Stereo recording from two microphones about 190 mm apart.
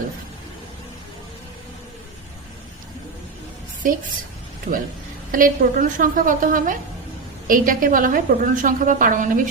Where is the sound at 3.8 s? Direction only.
45° right (ahead or behind).